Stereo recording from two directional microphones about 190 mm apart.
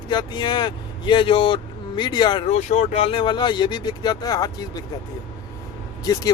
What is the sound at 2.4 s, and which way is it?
Speech, 35° left (ahead or behind).